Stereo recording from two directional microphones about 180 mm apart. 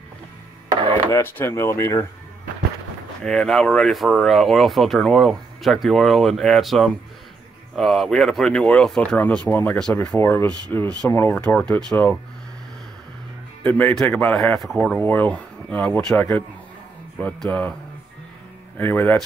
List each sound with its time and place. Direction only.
0.7 s chopping: 25° right (ahead or behind)
1.1 s a man's voice: 15° left (ahead or behind)
3.3 s a man's voice: 5° left (ahead or behind)
13.7 s a man's voice: 10° left (ahead or behind)
18.8 s a man's voice: 10° left (ahead or behind)